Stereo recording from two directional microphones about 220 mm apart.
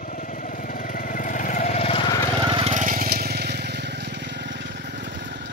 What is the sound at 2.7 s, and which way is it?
Vehicle, 35° right (ahead or behind).